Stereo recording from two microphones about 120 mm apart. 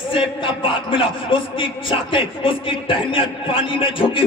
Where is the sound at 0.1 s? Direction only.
45° left (ahead or behind).